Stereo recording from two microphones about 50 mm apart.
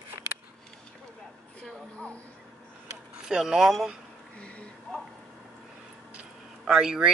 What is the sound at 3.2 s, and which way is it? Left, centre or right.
Speech, centre.